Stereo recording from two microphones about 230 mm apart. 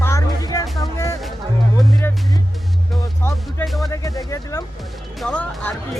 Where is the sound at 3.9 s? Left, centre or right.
Centre.